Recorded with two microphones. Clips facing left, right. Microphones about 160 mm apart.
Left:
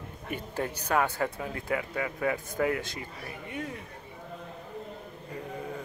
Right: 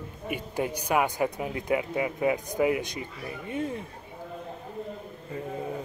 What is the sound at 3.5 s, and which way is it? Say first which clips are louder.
Speech: right 6 dB; 30° right (ahead or behind).